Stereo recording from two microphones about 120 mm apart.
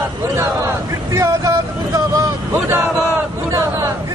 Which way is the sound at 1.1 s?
25° right (ahead or behind).